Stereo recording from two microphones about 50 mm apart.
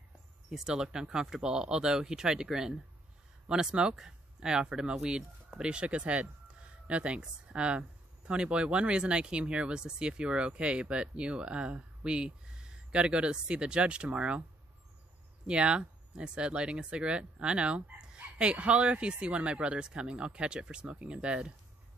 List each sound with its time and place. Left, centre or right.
0.5 s speech: centre
15.4 s speech: centre